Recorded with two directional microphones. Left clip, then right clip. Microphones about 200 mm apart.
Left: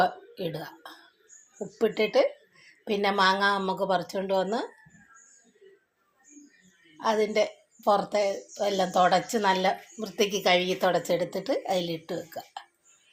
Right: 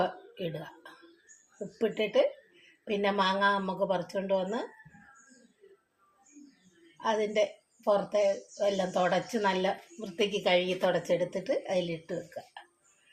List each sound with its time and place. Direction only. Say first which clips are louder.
0.0 s a sound: left 6 dB; 35° left (ahead or behind)
1.8 s a woman's voice: left 4 dB; 30° left (ahead or behind)
7.0 s a woman's voice: left 3 dB; 30° left (ahead or behind)